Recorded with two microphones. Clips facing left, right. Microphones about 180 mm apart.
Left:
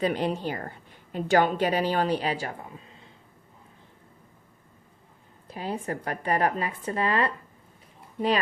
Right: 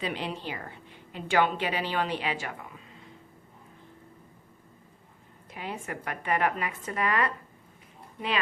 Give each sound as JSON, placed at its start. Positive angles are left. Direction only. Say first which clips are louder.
{"t": 0.0, "sound": "a woman's voice", "louder": "left 7 dB", "side_deg": 45}
{"t": 5.5, "sound": "a woman's voice", "louder": "left 5 dB", "side_deg": 35}